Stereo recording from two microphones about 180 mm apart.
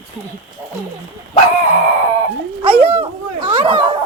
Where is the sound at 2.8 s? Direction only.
30° right (ahead or behind).